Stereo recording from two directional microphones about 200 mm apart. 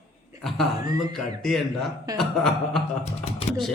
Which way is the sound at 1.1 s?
Centre (ahead or behind).